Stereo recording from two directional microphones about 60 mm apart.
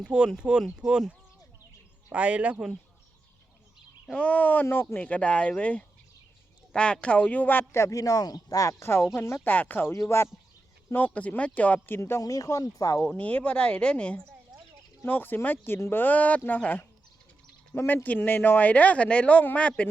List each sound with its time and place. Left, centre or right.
0.0 s speech: centre
2.1 s speech: centre
4.1 s speech: left
4.6 s speech: left
4.9 s speech: left
7.7 s speech: left
8.8 s speech: left
9.4 s speech: left
10.0 s speech: centre
10.9 s speech: left
11.9 s speech: left
12.2 s speech: left
13.1 s speech: left
15.0 s speech: left